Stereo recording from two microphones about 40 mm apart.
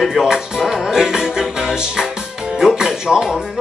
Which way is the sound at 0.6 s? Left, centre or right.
Centre.